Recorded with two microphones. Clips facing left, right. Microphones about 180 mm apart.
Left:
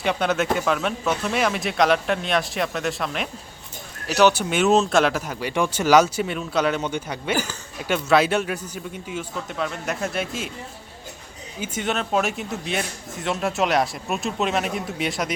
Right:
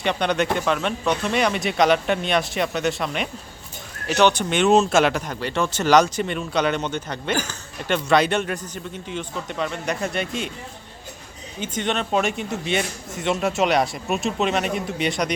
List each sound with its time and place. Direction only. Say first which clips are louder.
0.0 s speech: even; 5° left (ahead or behind)
11.6 s speech: right 1 dB; 5° left (ahead or behind)